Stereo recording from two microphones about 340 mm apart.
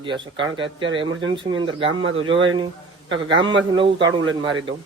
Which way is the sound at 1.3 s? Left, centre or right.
Centre.